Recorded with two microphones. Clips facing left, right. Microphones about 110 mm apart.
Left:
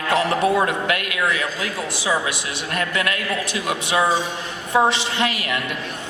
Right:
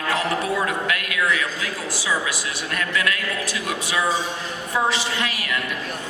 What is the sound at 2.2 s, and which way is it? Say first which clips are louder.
A man's voice: left 1 dB; 25° left (ahead or behind).